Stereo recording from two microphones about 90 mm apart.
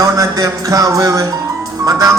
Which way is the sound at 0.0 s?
40° right (ahead or behind).